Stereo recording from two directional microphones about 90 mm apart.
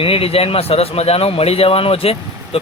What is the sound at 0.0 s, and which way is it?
Speech, 90° left.